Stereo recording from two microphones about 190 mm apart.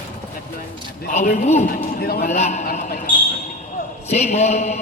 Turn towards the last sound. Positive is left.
turn(degrees=35)  # may be behind; listen again after turning